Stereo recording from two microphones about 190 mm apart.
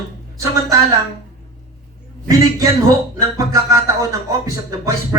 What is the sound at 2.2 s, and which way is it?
A man's voice, 20° right (ahead or behind).